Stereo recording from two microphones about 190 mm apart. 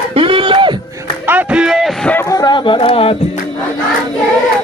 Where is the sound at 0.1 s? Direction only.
30° right (ahead or behind).